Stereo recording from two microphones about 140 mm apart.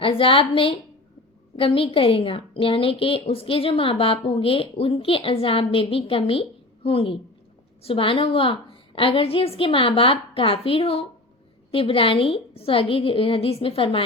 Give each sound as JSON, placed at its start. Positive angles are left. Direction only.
{"t": 0.0, "sound": "a woman's voice", "side_deg": 40}